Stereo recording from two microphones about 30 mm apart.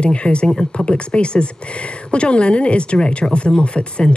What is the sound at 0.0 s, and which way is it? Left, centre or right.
Speech, left.